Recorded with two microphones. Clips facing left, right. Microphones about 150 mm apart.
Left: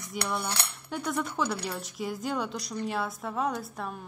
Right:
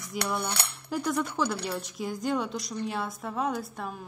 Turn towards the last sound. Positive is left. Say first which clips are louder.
# right 1 dB
turn(degrees=0)  # may be behind; listen again after turning